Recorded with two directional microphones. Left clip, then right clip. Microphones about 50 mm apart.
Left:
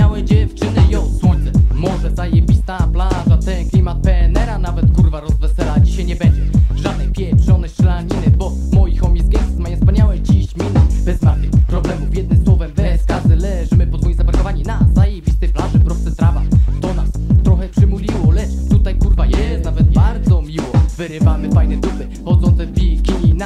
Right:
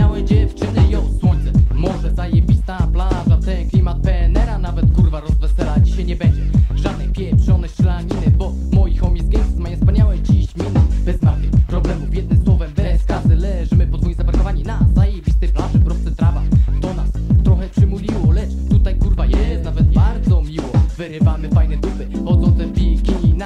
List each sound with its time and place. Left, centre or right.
0.0 s music: left